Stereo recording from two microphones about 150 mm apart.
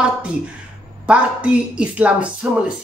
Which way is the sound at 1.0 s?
10° right (ahead or behind).